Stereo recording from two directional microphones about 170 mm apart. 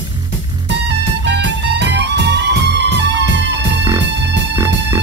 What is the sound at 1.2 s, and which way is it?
Music, 90° right.